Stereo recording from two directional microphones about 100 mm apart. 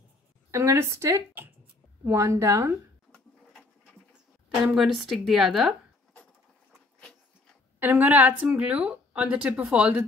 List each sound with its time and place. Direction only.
0.5 s speech: 30° right (ahead or behind)
4.6 s a woman's voice: centre (ahead or behind)
7.8 s speech: 20° right (ahead or behind)